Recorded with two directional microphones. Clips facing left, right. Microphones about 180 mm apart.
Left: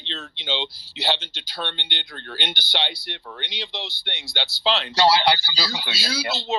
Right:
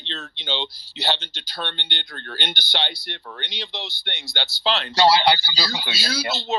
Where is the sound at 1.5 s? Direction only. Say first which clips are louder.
Even; 45° right (ahead or behind).